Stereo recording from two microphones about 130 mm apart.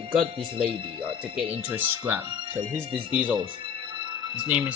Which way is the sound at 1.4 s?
55° right (ahead or behind).